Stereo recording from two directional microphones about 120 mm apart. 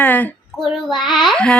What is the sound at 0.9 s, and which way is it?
Speech, centre (ahead or behind).